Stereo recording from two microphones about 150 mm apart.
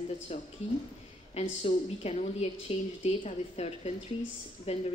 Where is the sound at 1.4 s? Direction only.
45° left (ahead or behind).